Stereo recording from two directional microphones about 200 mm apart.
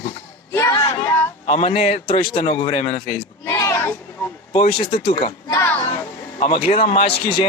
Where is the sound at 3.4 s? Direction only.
10° left (ahead or behind).